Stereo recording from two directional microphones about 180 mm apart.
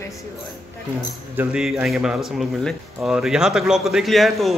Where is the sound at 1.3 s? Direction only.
10° right (ahead or behind).